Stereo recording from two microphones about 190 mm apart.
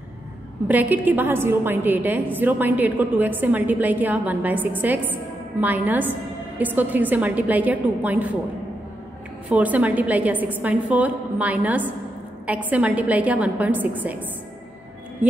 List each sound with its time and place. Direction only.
0.7 s a woman's voice: 10° right (ahead or behind)
9.5 s a woman's voice: 5° right (ahead or behind)